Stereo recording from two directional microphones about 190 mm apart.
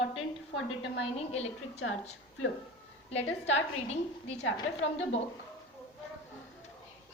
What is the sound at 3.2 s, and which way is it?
Speech, 90° left.